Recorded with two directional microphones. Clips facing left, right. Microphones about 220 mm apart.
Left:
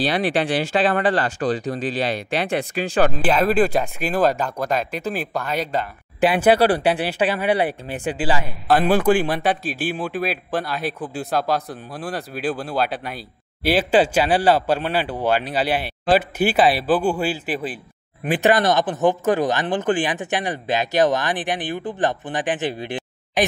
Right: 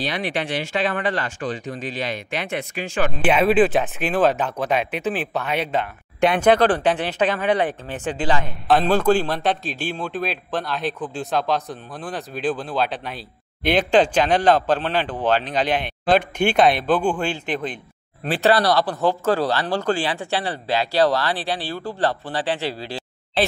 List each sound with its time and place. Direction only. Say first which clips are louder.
0.0 s speech: left 5 dB; 35° left (ahead or behind)
3.3 s speech: right 6 dB; 5° right (ahead or behind)
4.0 s speech: even; 5° left (ahead or behind)
4.4 s speech: right 1 dB; 5° right (ahead or behind)
5.7 s speech: right 1 dB; 5° left (ahead or behind)